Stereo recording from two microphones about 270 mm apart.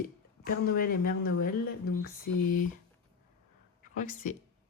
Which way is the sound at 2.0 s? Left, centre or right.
Left.